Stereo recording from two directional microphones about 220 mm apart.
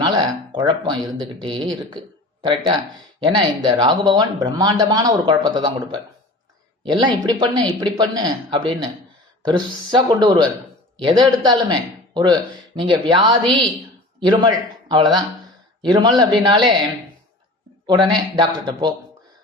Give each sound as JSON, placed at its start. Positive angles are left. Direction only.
{"t": 0.0, "sound": "a sound", "side_deg": -15}
{"t": 1.4, "sound": "a man's voice", "side_deg": -20}
{"t": 17.8, "sound": "speech", "side_deg": -20}